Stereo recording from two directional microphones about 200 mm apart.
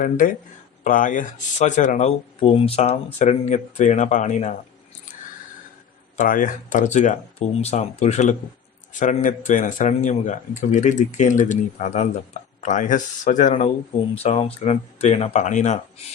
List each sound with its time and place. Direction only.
0.0 s speech: 40° left (ahead or behind)
6.1 s speech: 40° left (ahead or behind)